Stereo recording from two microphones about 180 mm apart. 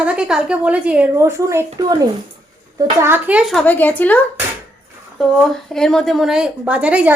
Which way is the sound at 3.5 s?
10° left (ahead or behind).